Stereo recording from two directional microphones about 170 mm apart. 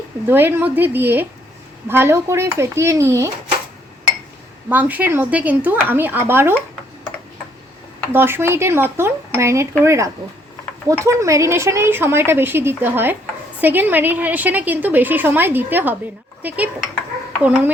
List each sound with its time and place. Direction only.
0.3 s a woman's voice: 10° right (ahead or behind)
4.7 s a woman's voice: 10° right (ahead or behind)
8.1 s a woman's voice: 15° right (ahead or behind)